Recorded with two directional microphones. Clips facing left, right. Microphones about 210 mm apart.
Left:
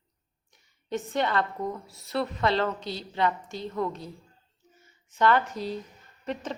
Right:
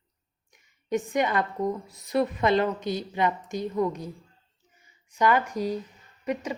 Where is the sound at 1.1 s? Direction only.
15° right (ahead or behind).